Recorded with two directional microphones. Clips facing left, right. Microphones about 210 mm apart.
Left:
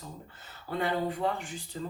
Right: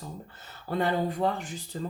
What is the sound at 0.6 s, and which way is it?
Speech, 40° right (ahead or behind).